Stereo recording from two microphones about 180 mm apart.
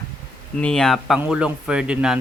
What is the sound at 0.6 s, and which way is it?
Speech, 5° left (ahead or behind).